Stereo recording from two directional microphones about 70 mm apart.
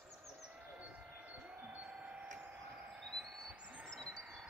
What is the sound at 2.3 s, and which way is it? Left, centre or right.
Train, centre.